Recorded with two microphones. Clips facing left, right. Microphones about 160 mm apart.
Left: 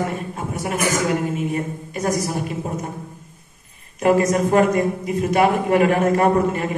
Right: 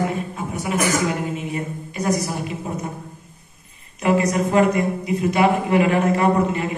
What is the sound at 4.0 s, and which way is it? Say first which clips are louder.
A woman's voice: left 2 dB; 45° left (ahead or behind).